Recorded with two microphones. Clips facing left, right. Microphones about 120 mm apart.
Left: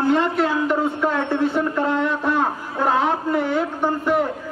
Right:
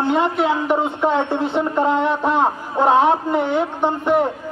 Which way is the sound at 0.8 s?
25° right (ahead or behind).